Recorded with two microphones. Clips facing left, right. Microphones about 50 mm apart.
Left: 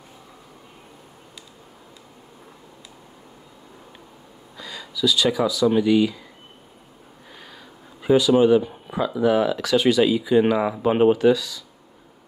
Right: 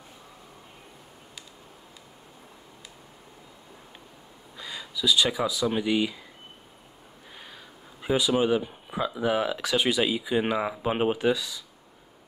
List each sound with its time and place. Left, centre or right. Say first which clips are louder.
4.6 s a sound: left 6 dB; centre
5.7 s speech: left 10 dB; centre
8.3 s speech: left 7 dB; centre
11.1 s speech: left 8 dB; centre